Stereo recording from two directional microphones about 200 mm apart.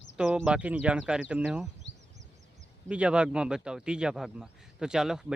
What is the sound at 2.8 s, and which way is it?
Speech, 5° right (ahead or behind).